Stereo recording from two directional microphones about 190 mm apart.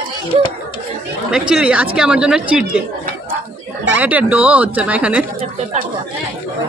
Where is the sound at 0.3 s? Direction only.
30° right (ahead or behind).